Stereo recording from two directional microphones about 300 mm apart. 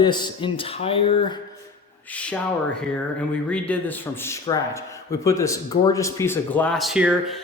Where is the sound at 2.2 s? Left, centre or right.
Centre.